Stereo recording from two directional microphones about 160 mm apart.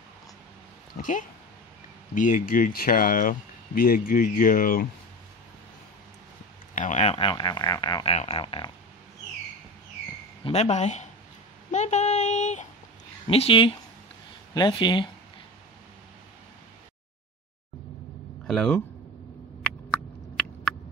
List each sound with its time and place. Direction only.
2.1 s speech: 55° left (ahead or behind)
6.7 s speech: 50° left (ahead or behind); by 8.7 s 30° left (ahead or behind)
10.4 s speech: 45° left (ahead or behind)
13.3 s speech: 35° left (ahead or behind)
18.5 s speech: 5° left (ahead or behind)
19.6 s a sound: 5° left (ahead or behind)